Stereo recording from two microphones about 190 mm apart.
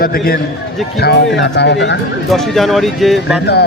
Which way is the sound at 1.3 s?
65° left (ahead or behind).